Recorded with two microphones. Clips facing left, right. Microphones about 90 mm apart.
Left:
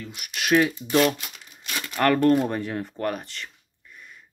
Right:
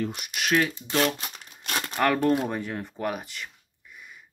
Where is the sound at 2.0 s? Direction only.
5° right (ahead or behind).